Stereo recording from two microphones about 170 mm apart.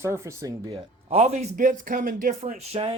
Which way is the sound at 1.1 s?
40° right (ahead or behind).